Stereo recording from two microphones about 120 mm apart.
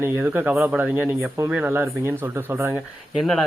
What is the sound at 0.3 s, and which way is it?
Speech, 15° right (ahead or behind).